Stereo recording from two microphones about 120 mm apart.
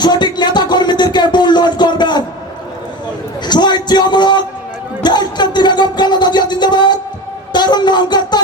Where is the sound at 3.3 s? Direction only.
40° left (ahead or behind).